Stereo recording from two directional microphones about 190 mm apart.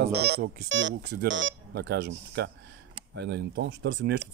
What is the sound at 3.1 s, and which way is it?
Speech, 65° right (ahead or behind).